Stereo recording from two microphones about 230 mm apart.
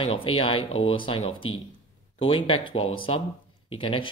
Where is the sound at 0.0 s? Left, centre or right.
Left.